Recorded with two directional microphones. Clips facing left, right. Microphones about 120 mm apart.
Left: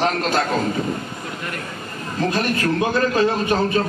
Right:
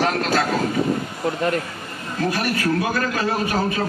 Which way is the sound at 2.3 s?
25° left (ahead or behind).